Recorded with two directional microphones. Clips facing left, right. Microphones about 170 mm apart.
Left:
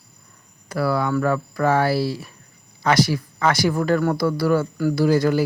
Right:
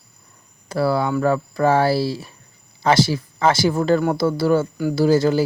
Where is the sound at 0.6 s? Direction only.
25° right (ahead or behind).